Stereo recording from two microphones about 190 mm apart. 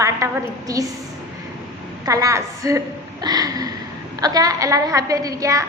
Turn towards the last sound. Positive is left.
turn(degrees=-15)  # may be behind; listen again after turning